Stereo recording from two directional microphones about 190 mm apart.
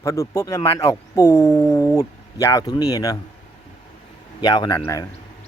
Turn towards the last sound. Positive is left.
turn(degrees=15)  # may be behind; listen again after turning